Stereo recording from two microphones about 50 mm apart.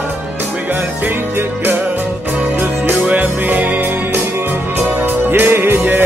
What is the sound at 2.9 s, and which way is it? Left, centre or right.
Music, right.